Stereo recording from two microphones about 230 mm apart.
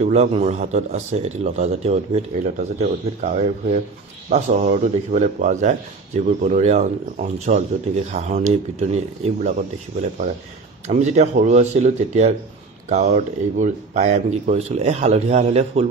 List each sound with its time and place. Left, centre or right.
0.0 s a man's voice: right
10.9 s a man's voice: right